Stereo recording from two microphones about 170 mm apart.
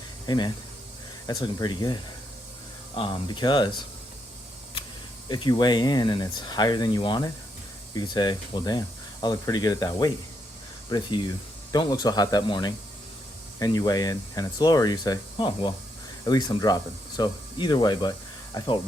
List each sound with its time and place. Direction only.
0.3 s speech: 25° left (ahead or behind)
5.3 s speech: 25° left (ahead or behind)